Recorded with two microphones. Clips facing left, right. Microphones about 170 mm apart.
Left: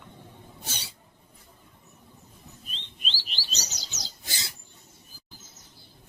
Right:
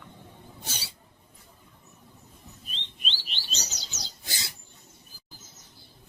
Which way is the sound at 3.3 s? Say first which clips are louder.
Even; 40° left (ahead or behind).